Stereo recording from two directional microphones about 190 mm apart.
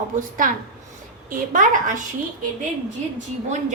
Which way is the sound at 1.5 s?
45° right (ahead or behind).